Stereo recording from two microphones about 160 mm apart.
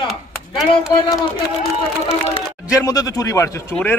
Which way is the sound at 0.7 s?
35° left (ahead or behind).